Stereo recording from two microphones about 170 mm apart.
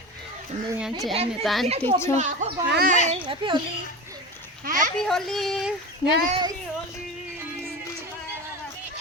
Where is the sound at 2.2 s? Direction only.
45° right (ahead or behind).